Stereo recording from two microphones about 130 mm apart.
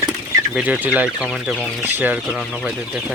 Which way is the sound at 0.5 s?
10° right (ahead or behind).